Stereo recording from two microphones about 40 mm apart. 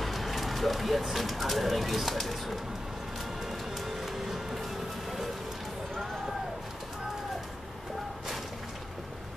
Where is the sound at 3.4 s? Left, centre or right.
Centre.